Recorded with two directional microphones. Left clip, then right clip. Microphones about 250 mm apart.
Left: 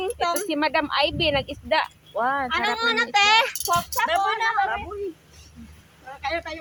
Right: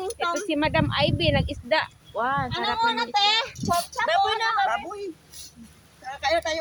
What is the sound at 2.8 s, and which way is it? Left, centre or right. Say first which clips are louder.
Speech: left 1 dB; left.